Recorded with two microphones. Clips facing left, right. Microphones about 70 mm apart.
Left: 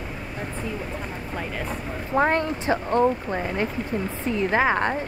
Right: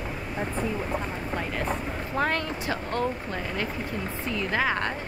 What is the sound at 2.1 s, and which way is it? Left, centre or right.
Speech, left.